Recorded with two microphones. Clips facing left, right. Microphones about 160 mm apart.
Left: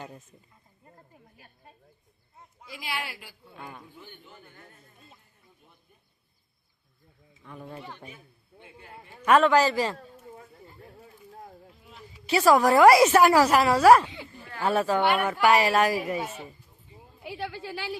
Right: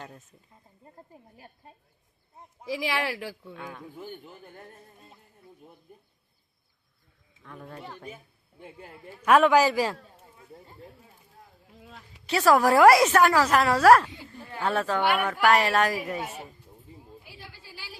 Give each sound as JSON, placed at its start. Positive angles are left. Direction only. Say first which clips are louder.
{"t": 2.6, "sound": "speech", "louder": "right 8 dB", "side_deg": -90}
{"t": 4.0, "sound": "speech", "louder": "right 7 dB", "side_deg": -40}
{"t": 7.4, "sound": "a woman's voice", "louder": "left 1 dB", "side_deg": 5}
{"t": 7.9, "sound": "speech", "louder": "right 4 dB", "side_deg": -40}
{"t": 9.2, "sound": "a man's voice", "louder": "right 1 dB", "side_deg": -10}
{"t": 12.2, "sound": "a woman's voice", "louder": "left 1 dB", "side_deg": 5}
{"t": 17.2, "sound": "a woman's voice", "louder": "left 13 dB", "side_deg": 70}